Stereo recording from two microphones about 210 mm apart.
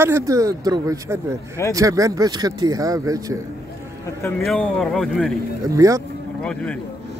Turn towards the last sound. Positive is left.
turn(degrees=-15)  # may be behind; listen again after turning